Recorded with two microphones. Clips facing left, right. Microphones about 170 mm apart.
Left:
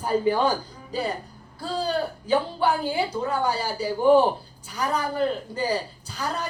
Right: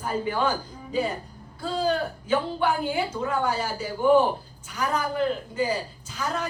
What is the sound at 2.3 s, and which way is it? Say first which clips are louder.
A woman's voice: left 2 dB; 35° left (ahead or behind).